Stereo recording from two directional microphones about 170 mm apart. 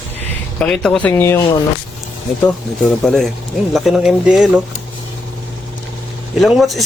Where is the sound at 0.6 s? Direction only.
5° left (ahead or behind).